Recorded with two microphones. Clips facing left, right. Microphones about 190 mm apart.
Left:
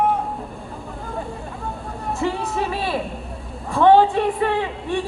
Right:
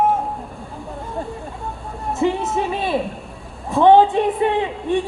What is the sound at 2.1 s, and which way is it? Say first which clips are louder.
Speech: right 4 dB; 20° right (ahead or behind).